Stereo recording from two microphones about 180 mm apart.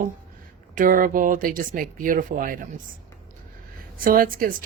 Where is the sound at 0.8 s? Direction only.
50° right (ahead or behind).